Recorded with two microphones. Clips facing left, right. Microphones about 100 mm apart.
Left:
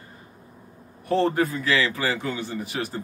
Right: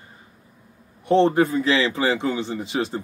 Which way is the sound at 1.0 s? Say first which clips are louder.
Right 5 dB; 20° right (ahead or behind).